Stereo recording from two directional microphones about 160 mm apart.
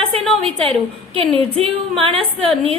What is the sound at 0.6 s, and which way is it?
A woman's voice, 35° right (ahead or behind).